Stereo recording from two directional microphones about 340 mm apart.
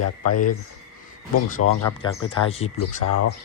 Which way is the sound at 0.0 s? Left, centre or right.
Left.